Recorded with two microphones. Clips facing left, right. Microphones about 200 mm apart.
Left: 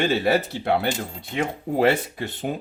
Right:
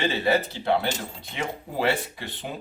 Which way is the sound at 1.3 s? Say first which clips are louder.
Left 6 dB; 50° left (ahead or behind).